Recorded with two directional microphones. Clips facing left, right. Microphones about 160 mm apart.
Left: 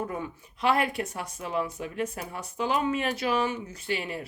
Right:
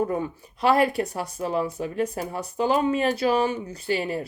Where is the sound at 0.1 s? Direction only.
35° right (ahead or behind).